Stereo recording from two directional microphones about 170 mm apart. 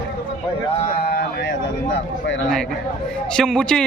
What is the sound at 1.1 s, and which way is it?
Speech, 80° left.